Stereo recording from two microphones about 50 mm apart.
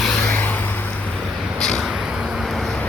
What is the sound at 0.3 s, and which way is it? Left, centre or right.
Vehicle, left.